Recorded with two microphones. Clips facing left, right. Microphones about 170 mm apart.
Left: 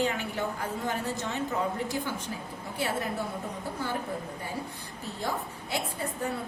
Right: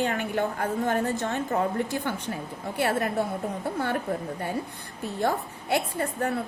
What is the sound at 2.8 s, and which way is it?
Speech, 60° right (ahead or behind).